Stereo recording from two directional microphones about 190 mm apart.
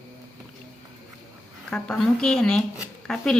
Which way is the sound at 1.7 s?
5° left (ahead or behind).